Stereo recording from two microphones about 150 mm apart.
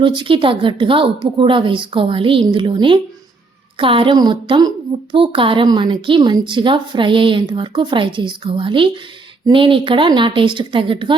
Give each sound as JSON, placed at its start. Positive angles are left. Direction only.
{"t": 0.0, "sound": "a woman's voice", "side_deg": -35}